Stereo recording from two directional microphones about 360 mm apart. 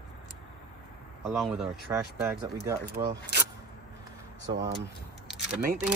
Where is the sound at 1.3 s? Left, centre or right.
Centre.